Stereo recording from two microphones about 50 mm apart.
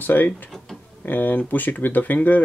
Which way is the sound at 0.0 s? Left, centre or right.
Left.